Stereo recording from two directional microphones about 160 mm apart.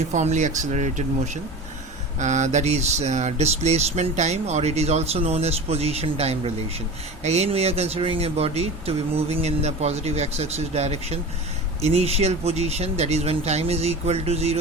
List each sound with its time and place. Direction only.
0.1 s speech: 50° right (ahead or behind)